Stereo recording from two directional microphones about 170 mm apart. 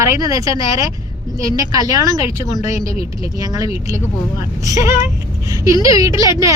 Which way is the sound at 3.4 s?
20° right (ahead or behind).